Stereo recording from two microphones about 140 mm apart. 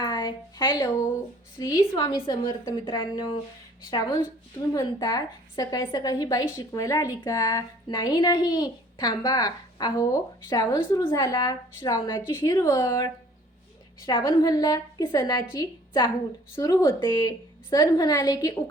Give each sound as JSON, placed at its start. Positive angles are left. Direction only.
{"t": 0.0, "sound": "a sound", "side_deg": 35}
{"t": 1.5, "sound": "a woman's voice", "side_deg": 30}
{"t": 2.8, "sound": "a woman's voice", "side_deg": 35}
{"t": 11.0, "sound": "a woman's voice", "side_deg": 20}
{"t": 14.1, "sound": "a woman's voice", "side_deg": 35}
{"t": 16.6, "sound": "a woman's voice", "side_deg": 20}